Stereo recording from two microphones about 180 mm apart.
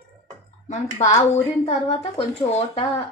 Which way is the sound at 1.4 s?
35° left (ahead or behind).